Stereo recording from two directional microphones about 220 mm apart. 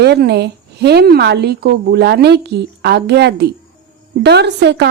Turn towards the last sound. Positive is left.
turn(degrees=-50)  # may be behind; listen again after turning